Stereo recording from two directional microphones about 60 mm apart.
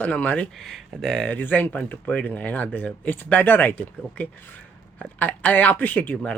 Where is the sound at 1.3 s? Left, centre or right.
Left.